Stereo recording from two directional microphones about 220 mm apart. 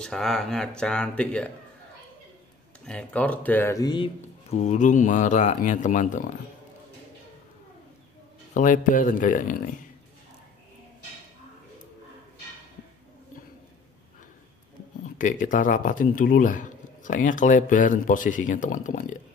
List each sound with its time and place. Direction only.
0.0 s speech: centre (ahead or behind)
2.8 s speech: 5° left (ahead or behind); by 6.2 s 35° left (ahead or behind)
8.5 s speech: 35° left (ahead or behind)
15.1 s speech: 35° left (ahead or behind)